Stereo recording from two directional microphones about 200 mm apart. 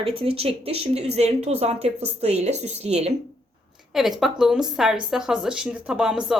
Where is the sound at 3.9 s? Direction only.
Centre (ahead or behind).